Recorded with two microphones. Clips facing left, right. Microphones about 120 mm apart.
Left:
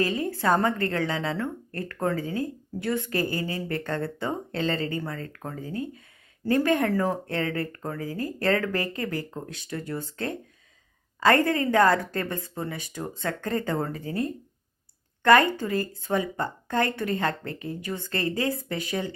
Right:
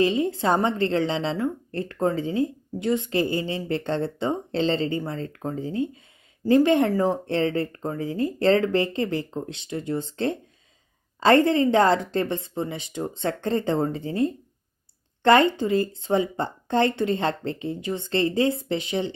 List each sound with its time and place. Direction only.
0.0 s a woman's voice: 20° right (ahead or behind)
7.3 s a woman's voice: 25° right (ahead or behind)